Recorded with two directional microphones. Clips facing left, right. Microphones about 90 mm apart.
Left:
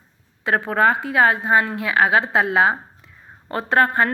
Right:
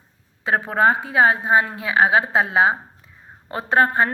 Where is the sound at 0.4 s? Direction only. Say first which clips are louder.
Even; 25° right (ahead or behind).